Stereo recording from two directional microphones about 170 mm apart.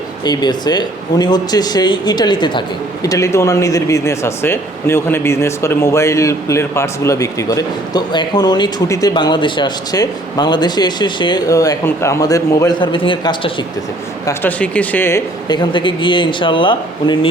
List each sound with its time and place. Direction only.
0.3 s speech: 25° left (ahead or behind)
14.3 s speech: 10° left (ahead or behind)
15.4 s speech: 25° left (ahead or behind)